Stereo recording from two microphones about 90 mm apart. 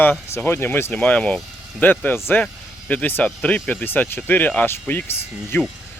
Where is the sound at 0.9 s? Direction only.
15° left (ahead or behind).